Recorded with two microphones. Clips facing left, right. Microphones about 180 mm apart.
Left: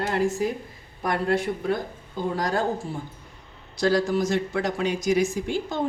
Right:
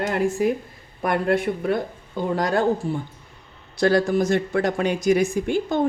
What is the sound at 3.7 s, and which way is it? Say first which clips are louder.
Speech: right 3 dB; 60° right (ahead or behind).